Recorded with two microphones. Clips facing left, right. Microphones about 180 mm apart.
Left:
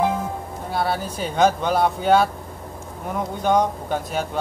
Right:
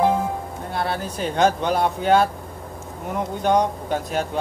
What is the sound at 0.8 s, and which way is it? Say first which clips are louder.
Speech: even; 5° left (ahead or behind).